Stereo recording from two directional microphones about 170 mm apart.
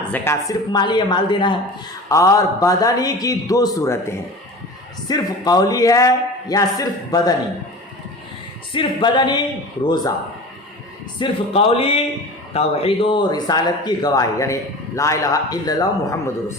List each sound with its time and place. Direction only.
0.1 s speech: 15° left (ahead or behind)
8.7 s speech: 30° left (ahead or behind)
11.2 s speech: 35° left (ahead or behind)